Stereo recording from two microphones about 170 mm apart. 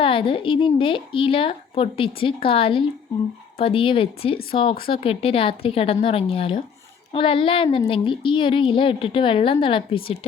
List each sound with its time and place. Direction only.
0.0 s a woman's voice: 30° left (ahead or behind)